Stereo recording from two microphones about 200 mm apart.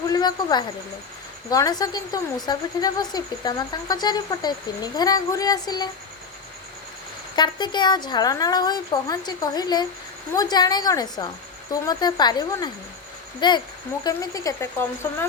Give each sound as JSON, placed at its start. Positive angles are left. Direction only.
{"t": 0.1, "sound": "a sound", "side_deg": 20}
{"t": 1.5, "sound": "speech", "side_deg": 20}
{"t": 7.3, "sound": "speech", "side_deg": 20}